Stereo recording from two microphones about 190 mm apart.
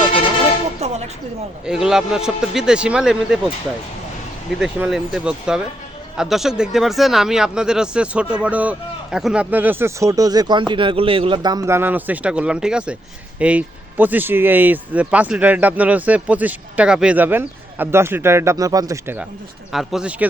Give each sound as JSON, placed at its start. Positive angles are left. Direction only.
{"t": 0.8, "sound": "a sound", "side_deg": -35}
{"t": 1.6, "sound": "speech", "side_deg": -5}
{"t": 4.6, "sound": "speech", "side_deg": -5}
{"t": 19.7, "sound": "speech", "side_deg": 0}